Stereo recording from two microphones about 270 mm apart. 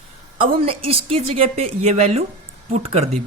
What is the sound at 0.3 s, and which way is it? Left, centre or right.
Speech, right.